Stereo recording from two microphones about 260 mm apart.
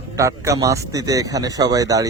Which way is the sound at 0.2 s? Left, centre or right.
Centre.